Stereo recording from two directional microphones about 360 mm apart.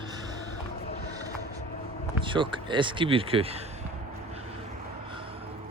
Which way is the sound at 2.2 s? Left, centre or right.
Centre.